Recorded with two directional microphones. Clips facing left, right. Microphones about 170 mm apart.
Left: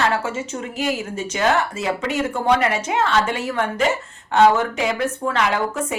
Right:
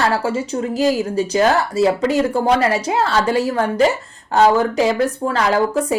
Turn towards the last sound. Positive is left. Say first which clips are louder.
# right 6 dB
turn(degrees=-35)  # may be behind; listen again after turning